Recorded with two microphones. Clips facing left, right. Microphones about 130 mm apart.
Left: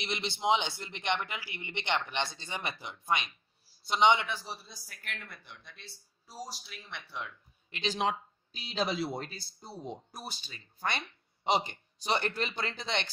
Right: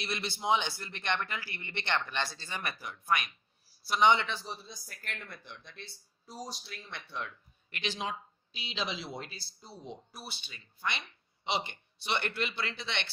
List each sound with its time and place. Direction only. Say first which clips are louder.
0.0 s a man's voice: left 3 dB; 20° left (ahead or behind); by 7.3 s 5° left (ahead or behind)
8.0 s speech: left 7 dB; 65° left (ahead or behind)
8.5 s speech: left 5 dB; 45° left (ahead or behind)